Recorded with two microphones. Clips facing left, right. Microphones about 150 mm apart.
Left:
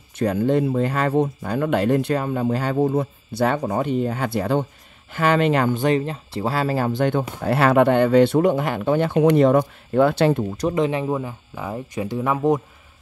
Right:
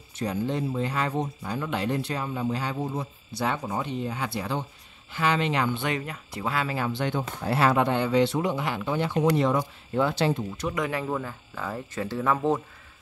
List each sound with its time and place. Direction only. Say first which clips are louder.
0.1 s speech: left 9 dB; 60° left (ahead or behind)
7.4 s speech: left 7 dB; 60° left (ahead or behind)
10.6 s speech: left 8 dB; 25° left (ahead or behind)